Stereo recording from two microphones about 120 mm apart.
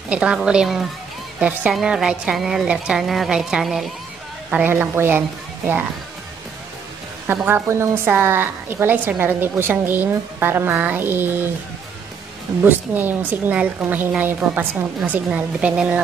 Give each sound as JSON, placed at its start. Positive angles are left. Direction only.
{"t": 0.1, "sound": "a woman's voice", "side_deg": -10}
{"t": 4.5, "sound": "a woman's voice", "side_deg": -15}
{"t": 7.4, "sound": "a woman's voice", "side_deg": -20}
{"t": 12.6, "sound": "a woman's voice", "side_deg": -15}